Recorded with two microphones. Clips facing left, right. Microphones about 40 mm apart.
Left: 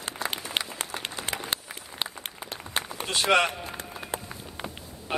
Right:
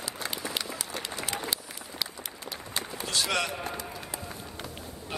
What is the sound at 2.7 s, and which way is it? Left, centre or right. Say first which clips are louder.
Run: left 3 dB; left.